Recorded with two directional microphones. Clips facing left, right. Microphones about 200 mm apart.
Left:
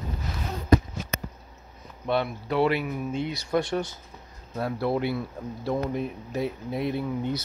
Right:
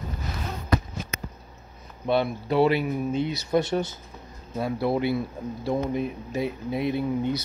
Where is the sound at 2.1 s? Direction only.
30° right (ahead or behind).